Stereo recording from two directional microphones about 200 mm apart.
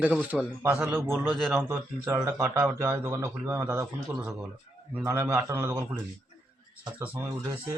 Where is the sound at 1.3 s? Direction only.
Centre (ahead or behind).